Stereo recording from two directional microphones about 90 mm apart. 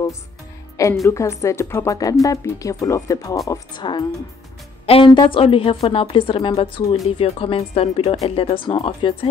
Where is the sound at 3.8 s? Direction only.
55° left (ahead or behind).